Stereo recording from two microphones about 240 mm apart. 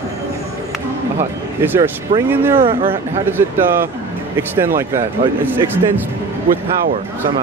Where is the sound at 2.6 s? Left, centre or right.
Right.